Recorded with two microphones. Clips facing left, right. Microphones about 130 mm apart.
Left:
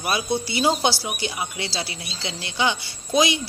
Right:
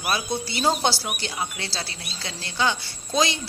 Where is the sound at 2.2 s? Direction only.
15° left (ahead or behind).